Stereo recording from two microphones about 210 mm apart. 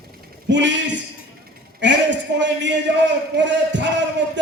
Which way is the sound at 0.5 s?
60° right (ahead or behind).